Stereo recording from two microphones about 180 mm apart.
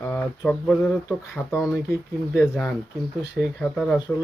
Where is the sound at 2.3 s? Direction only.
Centre (ahead or behind).